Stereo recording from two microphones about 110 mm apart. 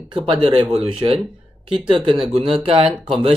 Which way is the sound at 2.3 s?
60° right (ahead or behind).